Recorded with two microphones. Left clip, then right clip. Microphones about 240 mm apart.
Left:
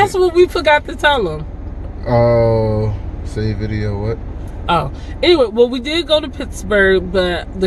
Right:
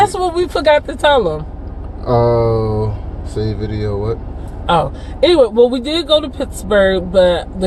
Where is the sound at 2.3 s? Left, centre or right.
Left.